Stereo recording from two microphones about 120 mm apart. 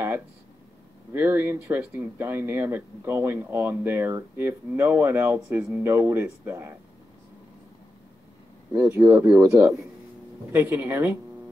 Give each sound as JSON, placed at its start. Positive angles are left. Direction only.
{"t": 1.1, "sound": "speech", "side_deg": -20}
{"t": 8.9, "sound": "speech", "side_deg": -20}